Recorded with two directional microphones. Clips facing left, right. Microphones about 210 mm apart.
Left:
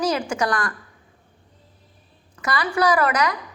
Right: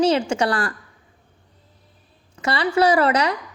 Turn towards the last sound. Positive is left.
turn(degrees=-30)  # may be behind; listen again after turning